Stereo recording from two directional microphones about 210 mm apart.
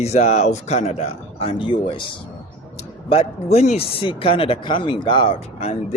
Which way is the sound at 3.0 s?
30° left (ahead or behind).